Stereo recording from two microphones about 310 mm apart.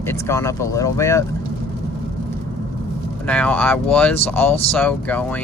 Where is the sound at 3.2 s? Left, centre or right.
Centre.